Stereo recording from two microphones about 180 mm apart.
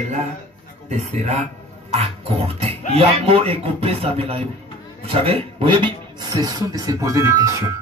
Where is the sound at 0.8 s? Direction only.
40° right (ahead or behind).